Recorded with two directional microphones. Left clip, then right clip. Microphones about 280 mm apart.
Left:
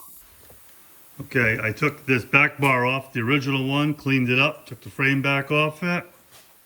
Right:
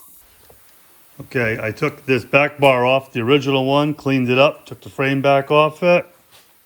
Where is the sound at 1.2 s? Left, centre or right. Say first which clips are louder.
Right 1 dB; centre.